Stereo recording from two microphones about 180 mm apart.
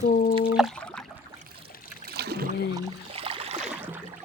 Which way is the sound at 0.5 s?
Centre (ahead or behind).